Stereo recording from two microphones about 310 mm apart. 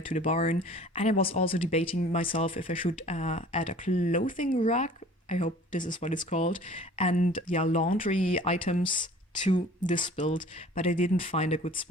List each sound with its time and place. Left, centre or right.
0.1 s speech: left